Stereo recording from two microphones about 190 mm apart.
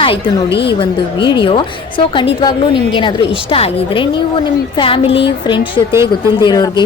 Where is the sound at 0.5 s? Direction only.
60° left (ahead or behind).